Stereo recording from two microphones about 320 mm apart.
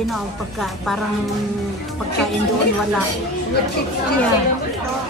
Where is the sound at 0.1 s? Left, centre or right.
Centre.